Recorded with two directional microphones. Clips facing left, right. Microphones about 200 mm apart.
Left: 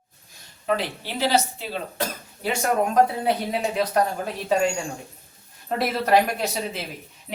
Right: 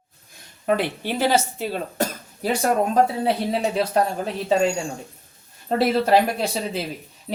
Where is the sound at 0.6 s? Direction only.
50° right (ahead or behind).